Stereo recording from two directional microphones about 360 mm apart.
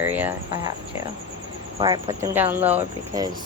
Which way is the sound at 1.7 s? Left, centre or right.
Centre.